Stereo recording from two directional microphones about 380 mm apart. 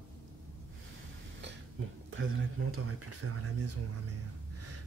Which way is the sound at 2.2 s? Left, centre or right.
Right.